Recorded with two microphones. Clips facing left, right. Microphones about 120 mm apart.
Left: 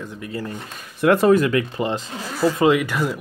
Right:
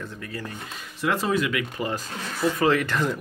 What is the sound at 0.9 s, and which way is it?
Speech, 60° left (ahead or behind).